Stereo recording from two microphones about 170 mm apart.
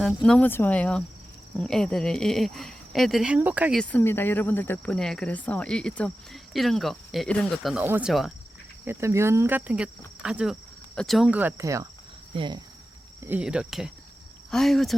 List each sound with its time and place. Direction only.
0.0 s speech: 5° left (ahead or behind)
3.8 s speech: 10° left (ahead or behind)
7.8 s cricket: 10° right (ahead or behind)
12.3 s speech: 30° right (ahead or behind)
13.2 s speech: 10° right (ahead or behind)